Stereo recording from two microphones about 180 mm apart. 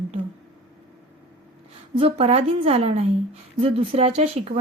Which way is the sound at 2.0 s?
35° right (ahead or behind).